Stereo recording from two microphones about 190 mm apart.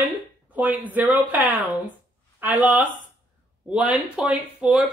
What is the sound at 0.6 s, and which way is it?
Speech, 10° right (ahead or behind).